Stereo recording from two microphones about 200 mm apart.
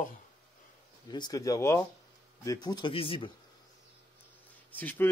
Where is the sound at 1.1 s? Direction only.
20° left (ahead or behind).